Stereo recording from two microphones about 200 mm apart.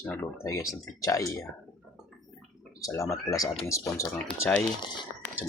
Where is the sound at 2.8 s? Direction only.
15° left (ahead or behind).